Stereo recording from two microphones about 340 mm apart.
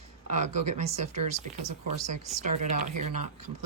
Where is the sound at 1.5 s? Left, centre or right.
Right.